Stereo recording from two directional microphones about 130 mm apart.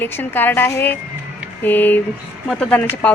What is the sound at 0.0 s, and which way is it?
Speech, 15° left (ahead or behind).